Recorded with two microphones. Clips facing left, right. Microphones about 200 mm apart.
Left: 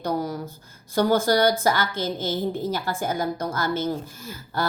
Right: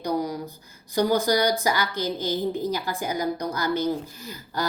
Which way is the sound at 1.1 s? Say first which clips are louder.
Left 3 dB; 15° right (ahead or behind).